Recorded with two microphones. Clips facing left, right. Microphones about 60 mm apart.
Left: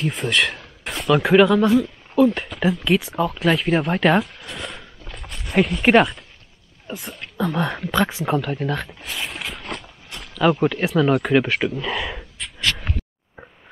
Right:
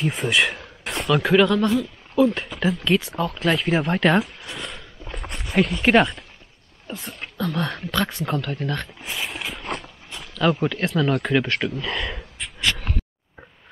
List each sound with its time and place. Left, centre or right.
0.0 s speech: centre
5.0 s a sound: right
5.4 s speech: centre
7.3 s speech: centre
9.1 s a sound: centre
9.8 s speech: centre